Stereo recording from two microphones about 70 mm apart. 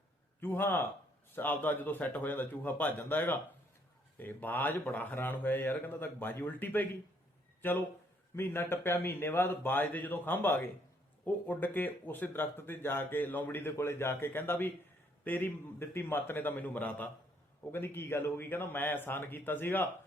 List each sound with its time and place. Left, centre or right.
0.3 s speech: left